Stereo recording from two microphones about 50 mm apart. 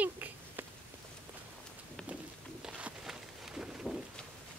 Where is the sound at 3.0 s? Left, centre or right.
Centre.